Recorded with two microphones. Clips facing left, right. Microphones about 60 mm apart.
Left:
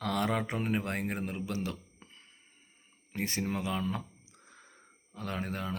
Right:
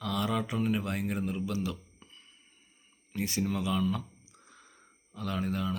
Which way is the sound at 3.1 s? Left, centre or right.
Left.